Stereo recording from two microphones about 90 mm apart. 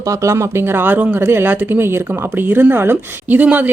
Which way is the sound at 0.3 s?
30° right (ahead or behind).